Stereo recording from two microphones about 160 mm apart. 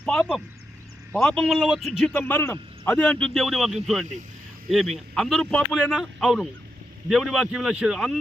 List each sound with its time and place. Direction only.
0.0 s speech: 5° left (ahead or behind)
2.1 s a man's voice: 10° left (ahead or behind)